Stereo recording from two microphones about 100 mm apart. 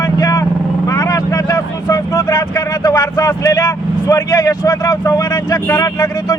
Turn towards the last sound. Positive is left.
turn(degrees=35)  # may be behind; listen again after turning